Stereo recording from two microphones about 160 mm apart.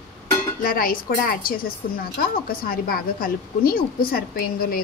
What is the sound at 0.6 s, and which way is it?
A woman's voice, 60° left (ahead or behind).